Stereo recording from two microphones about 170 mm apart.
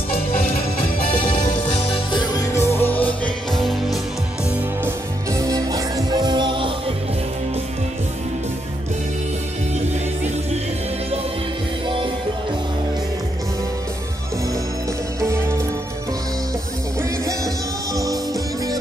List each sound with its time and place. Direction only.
0.1 s music: 35° left (ahead or behind)
2.5 s music: 15° left (ahead or behind)
4.8 s music: 20° right (ahead or behind)
15.1 s music: 15° right (ahead or behind)
17.9 s music: 20° right (ahead or behind)